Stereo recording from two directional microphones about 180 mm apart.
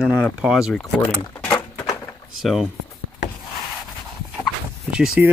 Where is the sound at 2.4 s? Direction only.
Centre (ahead or behind).